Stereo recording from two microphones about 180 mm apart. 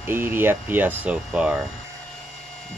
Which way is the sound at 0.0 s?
10° right (ahead or behind).